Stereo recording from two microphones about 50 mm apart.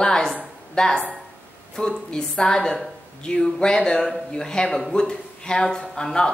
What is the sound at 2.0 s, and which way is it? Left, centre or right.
Speech, centre.